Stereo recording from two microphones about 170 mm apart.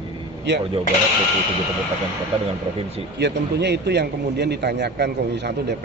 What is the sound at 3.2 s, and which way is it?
A man's voice, 80° right.